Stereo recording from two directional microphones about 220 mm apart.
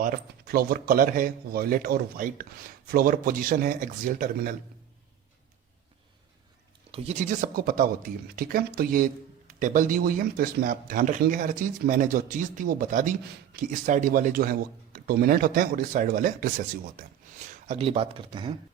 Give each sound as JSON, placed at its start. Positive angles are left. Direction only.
{"t": 0.0, "sound": "a man's voice", "side_deg": -40}
{"t": 6.9, "sound": "a man's voice", "side_deg": -30}
{"t": 17.7, "sound": "speech", "side_deg": -25}